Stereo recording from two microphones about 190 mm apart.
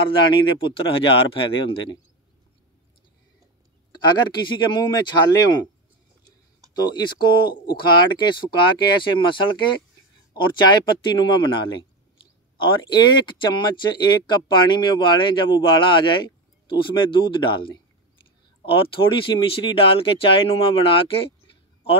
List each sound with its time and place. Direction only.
0.0 s speech: 25° left (ahead or behind)
3.9 s speech: 25° left (ahead or behind)
6.7 s speech: 20° left (ahead or behind)